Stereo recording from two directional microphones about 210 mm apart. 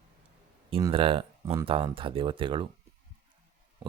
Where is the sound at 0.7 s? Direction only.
25° right (ahead or behind).